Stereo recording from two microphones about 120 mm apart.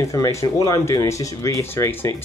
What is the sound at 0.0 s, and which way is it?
Speech, 25° left (ahead or behind).